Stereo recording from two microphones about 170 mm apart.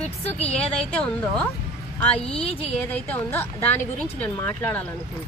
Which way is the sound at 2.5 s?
10° left (ahead or behind).